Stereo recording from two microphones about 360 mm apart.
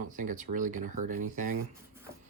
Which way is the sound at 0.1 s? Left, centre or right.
Right.